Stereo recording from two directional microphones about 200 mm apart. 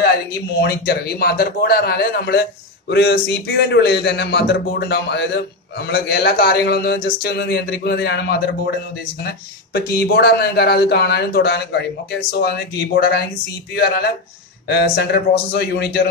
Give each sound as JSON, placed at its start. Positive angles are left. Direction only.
{"t": 0.6, "sound": "a man's voice", "side_deg": 50}
{"t": 9.8, "sound": "speech", "side_deg": 50}
{"t": 14.7, "sound": "speech", "side_deg": 55}